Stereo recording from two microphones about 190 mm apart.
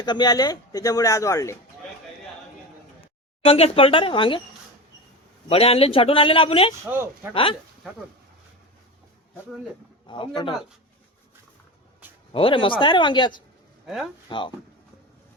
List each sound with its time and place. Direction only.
0.0 s speech: 20° left (ahead or behind)
3.4 s speech: 30° left (ahead or behind)
5.5 s speech: 30° left (ahead or behind)
6.8 s speech: 10° right (ahead or behind)
10.1 s speech: 25° left (ahead or behind)
12.3 s speech: 30° left (ahead or behind)
13.8 s speech: centre (ahead or behind)
14.3 s speech: 25° left (ahead or behind)